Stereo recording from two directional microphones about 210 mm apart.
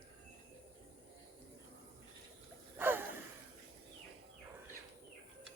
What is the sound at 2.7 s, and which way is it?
Gasp, 10° right (ahead or behind).